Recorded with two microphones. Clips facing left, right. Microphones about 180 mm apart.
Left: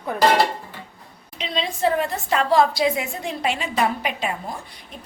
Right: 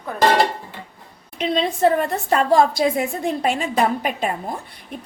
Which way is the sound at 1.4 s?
55° right (ahead or behind).